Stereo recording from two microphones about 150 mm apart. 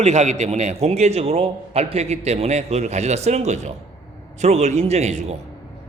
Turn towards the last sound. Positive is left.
turn(degrees=-50)  # may be behind; listen again after turning